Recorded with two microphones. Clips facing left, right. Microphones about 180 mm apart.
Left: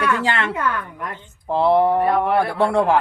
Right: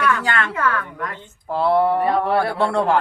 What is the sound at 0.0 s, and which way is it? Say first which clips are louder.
Speech: even; 25° left (ahead or behind).